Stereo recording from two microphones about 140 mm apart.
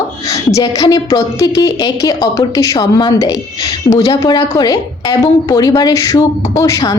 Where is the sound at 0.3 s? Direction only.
20° left (ahead or behind).